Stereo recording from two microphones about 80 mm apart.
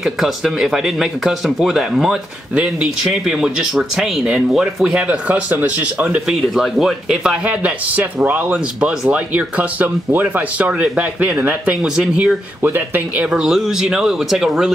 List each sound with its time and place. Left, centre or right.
0.0 s speech: centre
4.9 s speech: right
6.5 s speech: centre
7.4 s speech: centre
12.6 s speech: right
13.3 s speech: centre